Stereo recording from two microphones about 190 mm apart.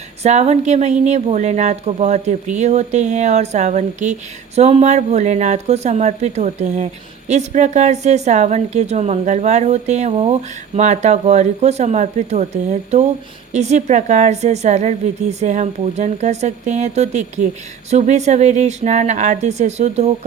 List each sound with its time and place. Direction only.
0.2 s speech: 35° right (ahead or behind)